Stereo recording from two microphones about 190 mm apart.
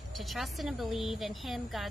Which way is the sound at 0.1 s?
Centre (ahead or behind).